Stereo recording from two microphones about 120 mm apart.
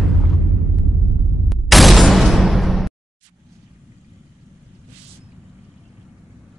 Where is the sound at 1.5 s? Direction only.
Centre (ahead or behind).